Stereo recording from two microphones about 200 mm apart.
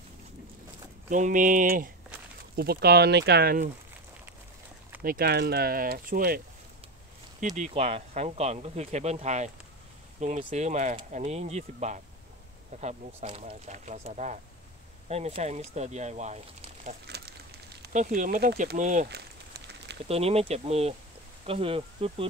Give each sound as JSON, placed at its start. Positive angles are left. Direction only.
{"t": 1.1, "sound": "speech", "side_deg": -40}
{"t": 5.0, "sound": "speech", "side_deg": -50}
{"t": 7.5, "sound": "speech", "side_deg": -35}
{"t": 17.0, "sound": "a sound", "side_deg": -55}
{"t": 17.9, "sound": "speech", "side_deg": -40}
{"t": 18.8, "sound": "speech", "side_deg": -35}
{"t": 20.1, "sound": "speech", "side_deg": -30}